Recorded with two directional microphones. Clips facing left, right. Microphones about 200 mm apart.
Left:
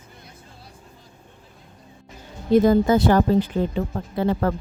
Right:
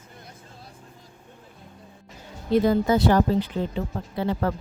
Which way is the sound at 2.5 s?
45° left (ahead or behind).